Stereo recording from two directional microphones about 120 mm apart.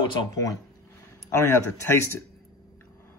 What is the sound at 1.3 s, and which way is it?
Speech, 20° left (ahead or behind).